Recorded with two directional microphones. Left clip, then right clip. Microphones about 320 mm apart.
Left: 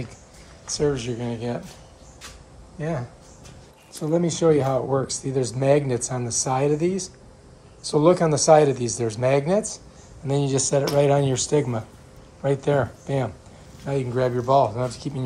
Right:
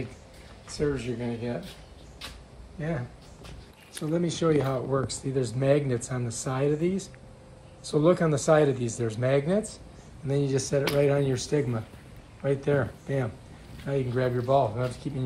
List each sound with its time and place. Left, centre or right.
0.7 s speech: centre
4.0 s speech: centre
7.8 s speech: centre
10.2 s speech: left
10.7 s speech: centre
11.2 s speech: left
12.6 s speech: centre